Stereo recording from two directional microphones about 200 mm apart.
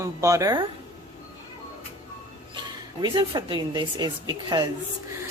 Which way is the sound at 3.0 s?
25° right (ahead or behind).